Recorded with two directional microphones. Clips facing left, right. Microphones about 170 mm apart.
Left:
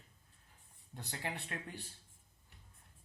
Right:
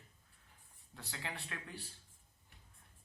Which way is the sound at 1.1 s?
40° left (ahead or behind).